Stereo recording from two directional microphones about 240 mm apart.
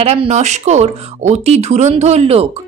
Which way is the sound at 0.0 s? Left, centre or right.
Right.